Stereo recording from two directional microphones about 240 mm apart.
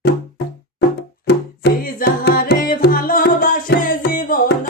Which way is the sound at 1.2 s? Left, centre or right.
Left.